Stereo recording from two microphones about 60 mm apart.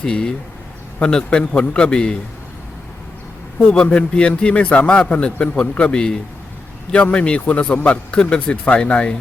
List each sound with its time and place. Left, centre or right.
0.0 s a man's voice: centre
3.8 s a man's voice: centre